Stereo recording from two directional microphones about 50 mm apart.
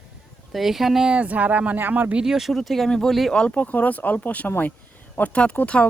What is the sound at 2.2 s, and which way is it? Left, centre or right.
Speech, centre.